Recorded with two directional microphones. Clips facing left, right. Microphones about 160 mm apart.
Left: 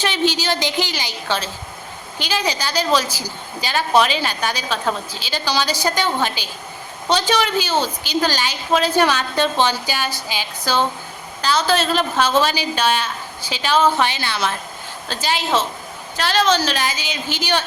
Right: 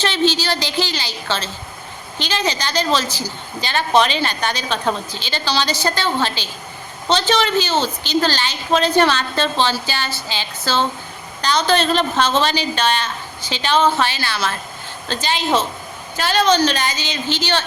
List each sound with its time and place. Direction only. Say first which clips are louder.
0.0 s a woman's voice: right 2 dB; 15° left (ahead or behind)
15.0 s a woman's voice: right 1 dB; 5° left (ahead or behind)